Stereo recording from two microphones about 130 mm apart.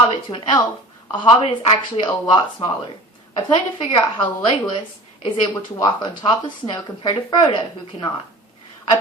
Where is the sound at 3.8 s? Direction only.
40° left (ahead or behind).